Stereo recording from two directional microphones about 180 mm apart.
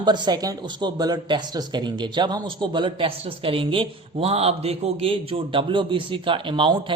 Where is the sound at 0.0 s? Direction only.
25° right (ahead or behind).